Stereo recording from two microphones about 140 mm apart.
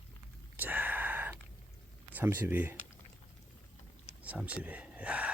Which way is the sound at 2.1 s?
15° right (ahead or behind).